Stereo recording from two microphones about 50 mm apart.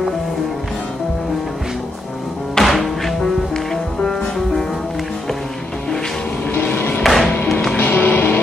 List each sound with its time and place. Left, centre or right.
2.5 s music: centre
6.5 s vehicle: left
7.0 s music: centre
7.7 s music: left